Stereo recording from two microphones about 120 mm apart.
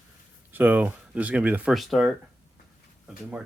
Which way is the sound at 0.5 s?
15° right (ahead or behind).